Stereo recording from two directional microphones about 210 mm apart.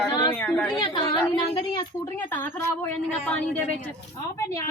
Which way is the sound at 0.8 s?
20° left (ahead or behind).